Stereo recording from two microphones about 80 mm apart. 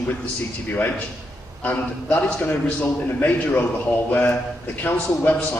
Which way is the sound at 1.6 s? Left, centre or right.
Left.